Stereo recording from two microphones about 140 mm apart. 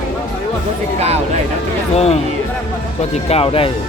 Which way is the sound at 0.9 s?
50° right (ahead or behind).